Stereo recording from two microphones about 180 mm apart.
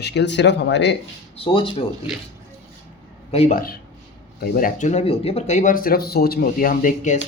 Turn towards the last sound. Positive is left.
turn(degrees=45)  # may be behind; listen again after turning